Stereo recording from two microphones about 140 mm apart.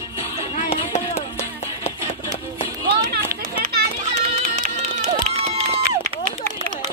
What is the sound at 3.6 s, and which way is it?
Children playing, 75° right (ahead or behind).